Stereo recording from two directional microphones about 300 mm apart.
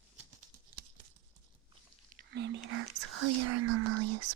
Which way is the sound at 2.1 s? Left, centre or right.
Right.